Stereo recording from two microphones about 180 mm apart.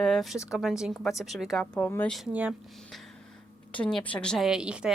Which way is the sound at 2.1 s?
5° right (ahead or behind).